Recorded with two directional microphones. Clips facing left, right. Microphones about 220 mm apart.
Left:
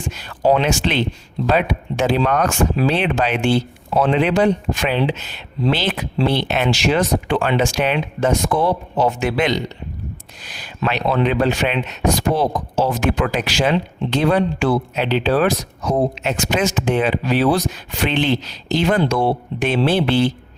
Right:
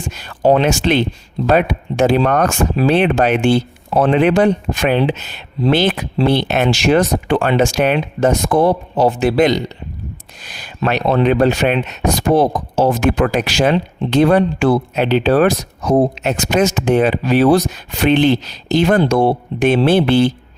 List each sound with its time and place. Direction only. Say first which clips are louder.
0.1 s speech: right 3 dB; 45° right (ahead or behind)